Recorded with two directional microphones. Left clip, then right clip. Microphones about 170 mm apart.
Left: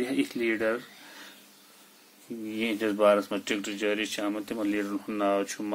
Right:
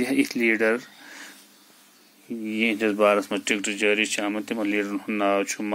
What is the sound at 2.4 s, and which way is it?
Speech, 20° right (ahead or behind).